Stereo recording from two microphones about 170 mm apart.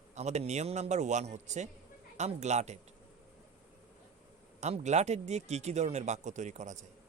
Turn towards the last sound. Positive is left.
turn(degrees=-45)  # may be behind; listen again after turning